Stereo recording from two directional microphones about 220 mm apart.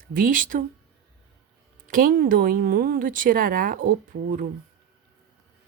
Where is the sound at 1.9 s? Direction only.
40° right (ahead or behind).